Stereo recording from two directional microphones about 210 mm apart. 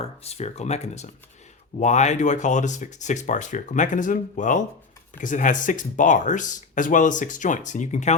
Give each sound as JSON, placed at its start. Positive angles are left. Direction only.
{"t": 0.0, "sound": "speech", "side_deg": 30}